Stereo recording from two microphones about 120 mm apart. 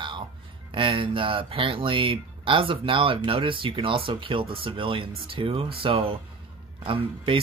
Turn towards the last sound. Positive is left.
turn(degrees=-45)  # may be behind; listen again after turning